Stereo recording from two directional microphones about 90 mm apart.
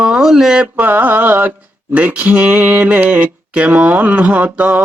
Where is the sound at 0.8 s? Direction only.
20° right (ahead or behind).